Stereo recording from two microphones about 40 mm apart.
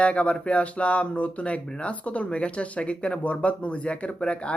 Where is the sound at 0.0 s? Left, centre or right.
Left.